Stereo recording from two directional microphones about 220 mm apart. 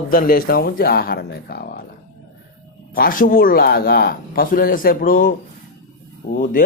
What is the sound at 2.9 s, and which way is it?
Speech, 40° left (ahead or behind).